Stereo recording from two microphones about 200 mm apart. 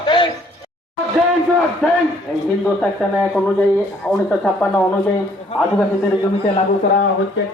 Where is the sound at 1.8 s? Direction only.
5° left (ahead or behind).